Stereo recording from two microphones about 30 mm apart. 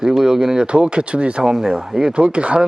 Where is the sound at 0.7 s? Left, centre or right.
Right.